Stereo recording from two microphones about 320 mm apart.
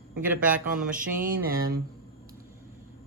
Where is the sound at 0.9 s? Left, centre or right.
Right.